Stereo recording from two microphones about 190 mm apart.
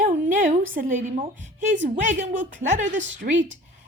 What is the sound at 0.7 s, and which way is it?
A woman's voice, 45° right (ahead or behind).